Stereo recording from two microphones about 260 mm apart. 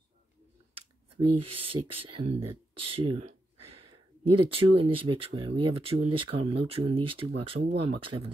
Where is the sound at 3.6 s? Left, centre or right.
Right.